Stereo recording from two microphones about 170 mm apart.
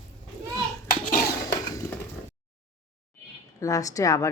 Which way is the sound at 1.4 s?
20° left (ahead or behind).